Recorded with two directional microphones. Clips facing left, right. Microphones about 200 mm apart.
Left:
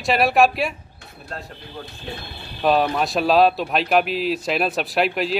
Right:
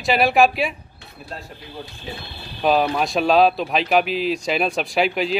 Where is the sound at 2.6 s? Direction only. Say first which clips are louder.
Even; centre (ahead or behind).